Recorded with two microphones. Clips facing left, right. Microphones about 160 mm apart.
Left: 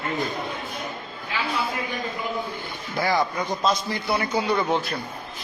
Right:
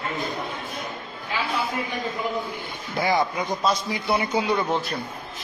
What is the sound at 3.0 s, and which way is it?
A man's voice, 20° right (ahead or behind).